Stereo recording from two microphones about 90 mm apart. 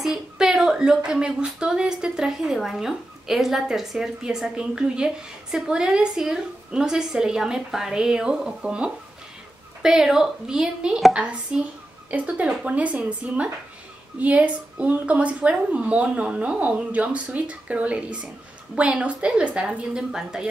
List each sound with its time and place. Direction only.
0.0 s speech: 5° right (ahead or behind)